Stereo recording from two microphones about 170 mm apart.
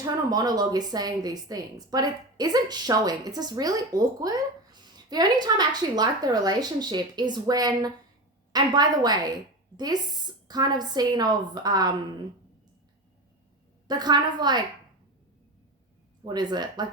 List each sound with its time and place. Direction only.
0.0 s a woman's voice: 20° right (ahead or behind)
13.8 s a woman's voice: 25° right (ahead or behind)
16.2 s a woman's voice: 25° right (ahead or behind)